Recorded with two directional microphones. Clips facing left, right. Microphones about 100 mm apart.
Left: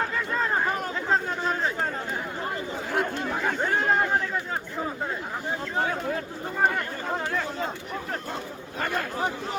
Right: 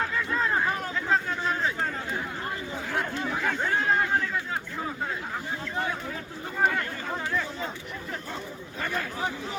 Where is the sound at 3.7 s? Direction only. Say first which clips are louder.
Left 2 dB; 40° left (ahead or behind).